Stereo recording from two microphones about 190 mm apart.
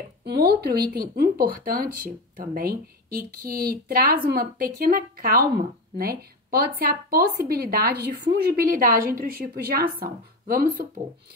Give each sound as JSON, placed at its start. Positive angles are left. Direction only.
{"t": 0.2, "sound": "speech", "side_deg": -60}